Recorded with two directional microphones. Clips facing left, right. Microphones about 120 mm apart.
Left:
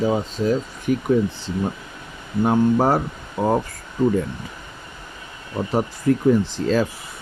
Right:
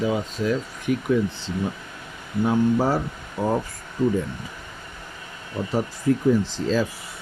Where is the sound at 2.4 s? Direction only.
55° left (ahead or behind).